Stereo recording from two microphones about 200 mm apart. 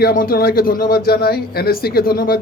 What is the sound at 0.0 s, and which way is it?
A man's voice, 50° left (ahead or behind).